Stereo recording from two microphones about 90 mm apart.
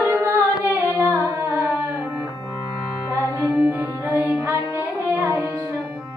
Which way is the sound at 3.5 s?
15° right (ahead or behind).